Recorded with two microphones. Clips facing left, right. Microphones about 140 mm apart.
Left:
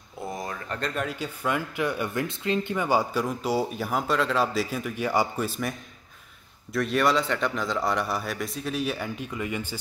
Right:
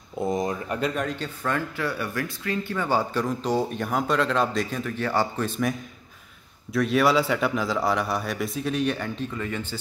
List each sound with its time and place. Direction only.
0.3 s speech: 20° right (ahead or behind)
0.7 s a man's voice: 5° right (ahead or behind)
1.0 s speech: 10° left (ahead or behind)
6.7 s a man's voice: centre (ahead or behind)